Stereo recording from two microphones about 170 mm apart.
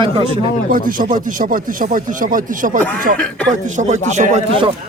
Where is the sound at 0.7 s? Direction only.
55° right (ahead or behind).